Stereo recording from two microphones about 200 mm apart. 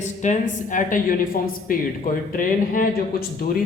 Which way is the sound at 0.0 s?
35° left (ahead or behind).